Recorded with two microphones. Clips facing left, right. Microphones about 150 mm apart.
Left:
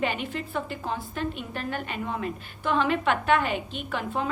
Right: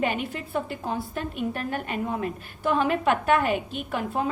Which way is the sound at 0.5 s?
40° right (ahead or behind).